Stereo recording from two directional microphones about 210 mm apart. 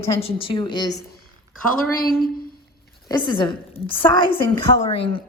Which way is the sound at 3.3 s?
25° left (ahead or behind).